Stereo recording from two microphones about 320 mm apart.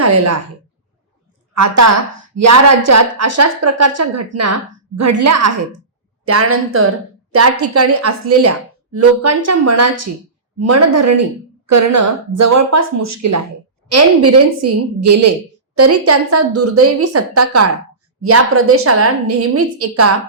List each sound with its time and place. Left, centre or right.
0.0 s a woman's voice: right
1.5 s a woman's voice: right